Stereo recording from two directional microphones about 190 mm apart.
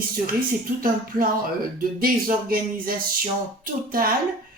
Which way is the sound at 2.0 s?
50° right (ahead or behind).